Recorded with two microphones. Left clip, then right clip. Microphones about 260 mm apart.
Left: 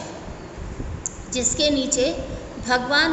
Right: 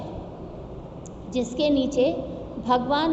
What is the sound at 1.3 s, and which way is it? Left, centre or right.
A woman's voice, centre.